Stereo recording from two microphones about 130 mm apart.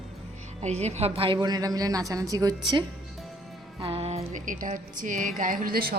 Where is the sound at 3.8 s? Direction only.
50° right (ahead or behind).